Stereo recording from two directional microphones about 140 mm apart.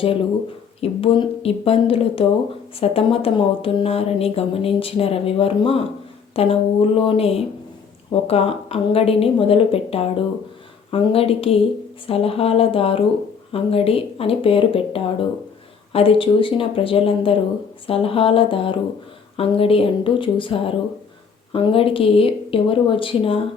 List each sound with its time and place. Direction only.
0.8 s a woman's voice: 45° left (ahead or behind)